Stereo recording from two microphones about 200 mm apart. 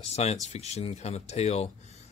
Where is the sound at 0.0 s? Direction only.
35° left (ahead or behind).